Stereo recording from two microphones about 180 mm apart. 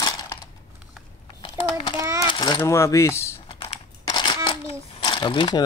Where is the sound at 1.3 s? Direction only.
25° left (ahead or behind).